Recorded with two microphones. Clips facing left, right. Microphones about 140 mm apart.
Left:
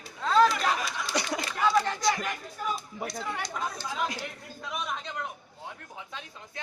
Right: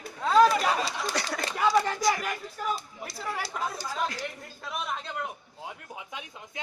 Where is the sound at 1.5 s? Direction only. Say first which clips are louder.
Right 1 dB; 5° right (ahead or behind).